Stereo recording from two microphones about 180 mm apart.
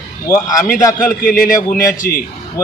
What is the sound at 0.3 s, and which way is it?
Speech, 20° left (ahead or behind).